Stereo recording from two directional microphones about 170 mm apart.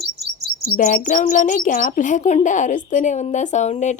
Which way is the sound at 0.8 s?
50° left (ahead or behind).